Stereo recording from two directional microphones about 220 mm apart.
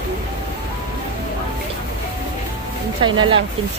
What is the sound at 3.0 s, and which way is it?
Speech, 20° right (ahead or behind).